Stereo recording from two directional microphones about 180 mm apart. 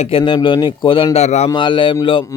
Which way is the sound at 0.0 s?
30° left (ahead or behind).